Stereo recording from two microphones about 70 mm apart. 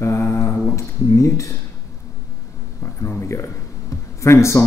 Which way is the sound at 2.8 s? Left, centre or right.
Left.